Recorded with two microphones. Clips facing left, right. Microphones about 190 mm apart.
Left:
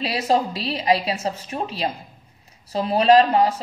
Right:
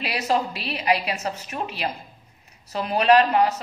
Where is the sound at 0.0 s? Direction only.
30° left (ahead or behind).